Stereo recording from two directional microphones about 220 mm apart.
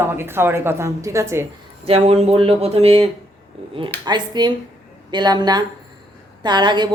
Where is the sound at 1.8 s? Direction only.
25° right (ahead or behind).